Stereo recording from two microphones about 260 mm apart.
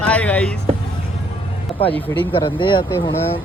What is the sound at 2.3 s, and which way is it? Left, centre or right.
Speech, centre.